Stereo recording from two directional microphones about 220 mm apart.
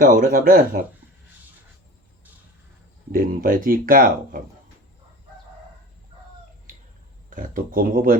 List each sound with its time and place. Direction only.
0.0 s speech: 40° right (ahead or behind)
3.1 s speech: 40° right (ahead or behind)
7.3 s speech: 40° right (ahead or behind)